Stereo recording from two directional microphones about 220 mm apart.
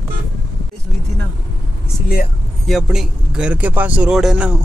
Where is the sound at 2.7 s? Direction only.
Centre (ahead or behind).